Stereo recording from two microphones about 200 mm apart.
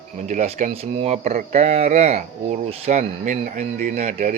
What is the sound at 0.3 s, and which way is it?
Speech, 35° right (ahead or behind).